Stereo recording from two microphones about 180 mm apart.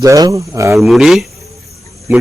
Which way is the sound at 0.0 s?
20° right (ahead or behind).